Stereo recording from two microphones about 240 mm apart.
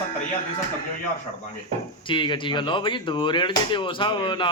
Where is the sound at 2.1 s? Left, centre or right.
Centre.